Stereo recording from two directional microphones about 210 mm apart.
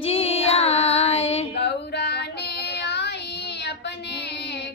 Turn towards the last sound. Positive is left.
turn(degrees=55)  # may be behind; listen again after turning